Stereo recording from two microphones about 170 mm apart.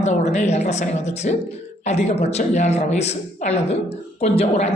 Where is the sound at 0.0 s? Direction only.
45° left (ahead or behind).